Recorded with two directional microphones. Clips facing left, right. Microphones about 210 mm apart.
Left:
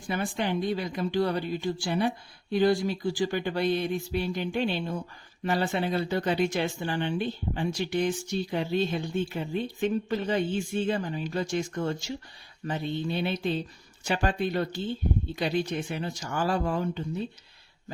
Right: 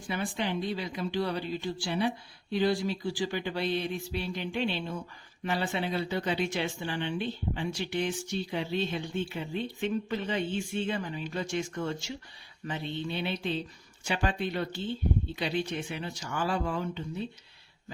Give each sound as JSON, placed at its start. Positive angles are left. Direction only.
{"t": 0.1, "sound": "speech", "side_deg": 45}